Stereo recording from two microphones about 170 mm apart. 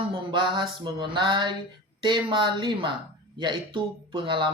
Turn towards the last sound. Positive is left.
turn(degrees=-30)  # may be behind; listen again after turning